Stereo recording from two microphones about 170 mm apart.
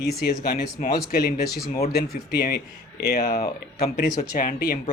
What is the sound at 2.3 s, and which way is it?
Speech, 70° left (ahead or behind).